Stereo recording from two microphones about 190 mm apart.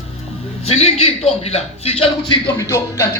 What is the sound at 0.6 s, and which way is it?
Speech, 35° left (ahead or behind).